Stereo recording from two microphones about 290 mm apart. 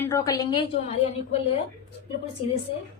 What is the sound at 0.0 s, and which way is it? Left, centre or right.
A woman's voice, centre.